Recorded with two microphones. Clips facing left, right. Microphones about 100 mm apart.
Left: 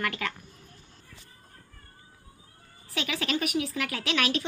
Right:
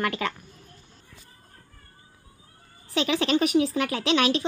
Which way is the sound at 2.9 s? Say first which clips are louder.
Right 7 dB; 25° right (ahead or behind).